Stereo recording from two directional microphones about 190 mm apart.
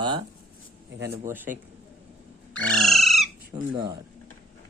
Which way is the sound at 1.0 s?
10° right (ahead or behind).